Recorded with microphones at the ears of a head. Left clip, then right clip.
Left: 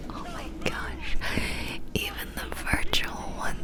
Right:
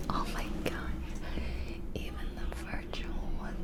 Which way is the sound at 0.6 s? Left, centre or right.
Left.